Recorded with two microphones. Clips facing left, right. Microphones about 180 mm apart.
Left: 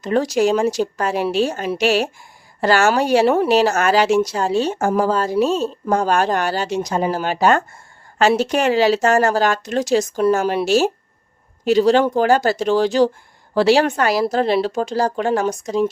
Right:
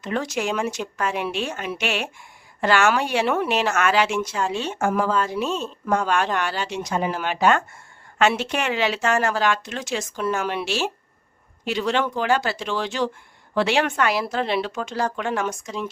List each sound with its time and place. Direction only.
0.0 s speech: 35° left (ahead or behind)